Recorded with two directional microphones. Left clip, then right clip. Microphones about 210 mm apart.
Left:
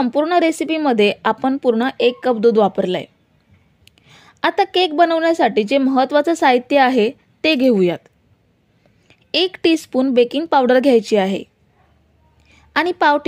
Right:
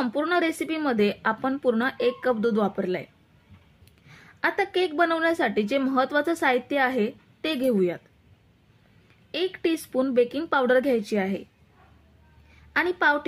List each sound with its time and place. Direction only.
0.0 s a woman's voice: 30° left (ahead or behind)
9.3 s a woman's voice: 40° left (ahead or behind)
12.5 s a woman's voice: 40° left (ahead or behind)